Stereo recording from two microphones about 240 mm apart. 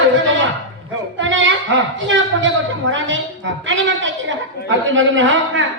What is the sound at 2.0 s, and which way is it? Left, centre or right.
Speech, right.